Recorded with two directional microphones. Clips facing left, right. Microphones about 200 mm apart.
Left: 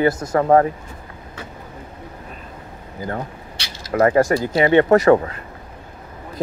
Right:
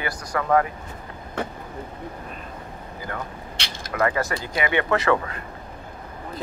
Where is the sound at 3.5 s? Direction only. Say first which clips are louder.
Right 1 dB; 55° right (ahead or behind).